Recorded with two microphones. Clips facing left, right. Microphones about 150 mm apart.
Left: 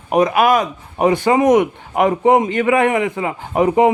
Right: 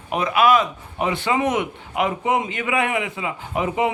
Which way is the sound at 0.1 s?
40° left (ahead or behind).